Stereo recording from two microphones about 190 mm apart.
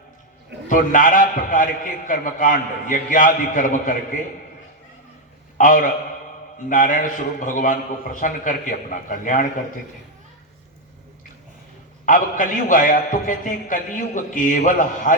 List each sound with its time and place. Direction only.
0.7 s a man's voice: 45° left (ahead or behind)
5.5 s a man's voice: 45° left (ahead or behind)
12.0 s a man's voice: 45° left (ahead or behind)